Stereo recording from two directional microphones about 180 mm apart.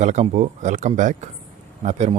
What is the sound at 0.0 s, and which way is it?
Speech, 40° right (ahead or behind).